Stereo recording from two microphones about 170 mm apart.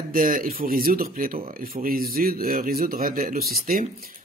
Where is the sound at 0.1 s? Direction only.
55° right (ahead or behind).